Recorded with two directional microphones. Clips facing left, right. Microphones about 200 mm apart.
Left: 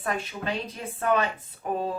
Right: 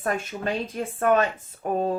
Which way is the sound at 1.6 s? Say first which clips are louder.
Right 3 dB; 45° right (ahead or behind).